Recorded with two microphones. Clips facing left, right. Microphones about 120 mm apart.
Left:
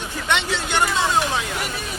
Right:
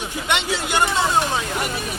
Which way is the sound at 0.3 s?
10° right (ahead or behind).